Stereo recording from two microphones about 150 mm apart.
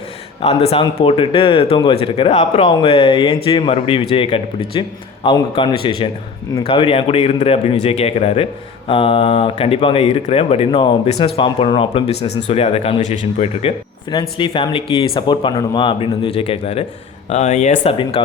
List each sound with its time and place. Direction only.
0.4 s speech: 40° left (ahead or behind)